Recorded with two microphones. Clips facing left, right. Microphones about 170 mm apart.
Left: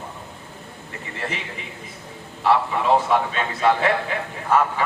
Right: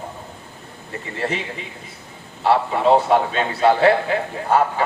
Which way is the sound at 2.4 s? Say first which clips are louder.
Right 3 dB; 30° right (ahead or behind).